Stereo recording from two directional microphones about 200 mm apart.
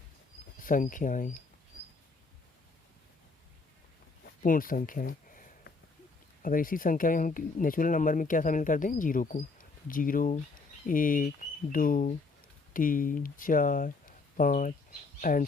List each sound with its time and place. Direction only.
0.6 s speech: 40° left (ahead or behind)
4.4 s a sound: 45° left (ahead or behind)
6.4 s speech: 45° left (ahead or behind)